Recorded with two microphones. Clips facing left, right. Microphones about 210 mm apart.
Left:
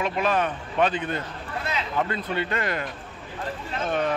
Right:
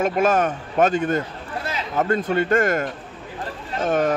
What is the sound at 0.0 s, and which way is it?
A man's voice, 45° right (ahead or behind).